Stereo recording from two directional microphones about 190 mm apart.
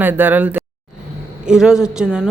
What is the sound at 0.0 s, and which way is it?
A woman's voice, 10° right (ahead or behind).